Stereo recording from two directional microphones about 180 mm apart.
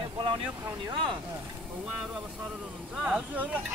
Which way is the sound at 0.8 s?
25° right (ahead or behind).